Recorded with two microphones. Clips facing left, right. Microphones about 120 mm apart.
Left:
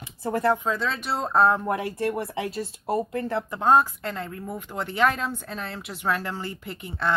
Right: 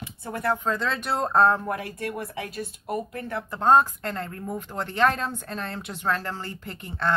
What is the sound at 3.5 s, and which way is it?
A woman's voice, 5° left (ahead or behind).